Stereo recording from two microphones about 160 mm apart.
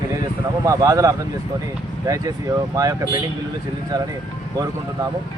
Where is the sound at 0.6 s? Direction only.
20° right (ahead or behind).